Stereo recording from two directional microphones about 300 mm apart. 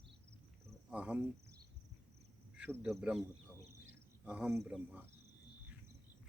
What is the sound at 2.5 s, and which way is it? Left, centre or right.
Speech, centre.